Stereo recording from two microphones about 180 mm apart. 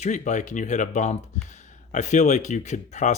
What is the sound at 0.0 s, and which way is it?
Speech, 40° left (ahead or behind).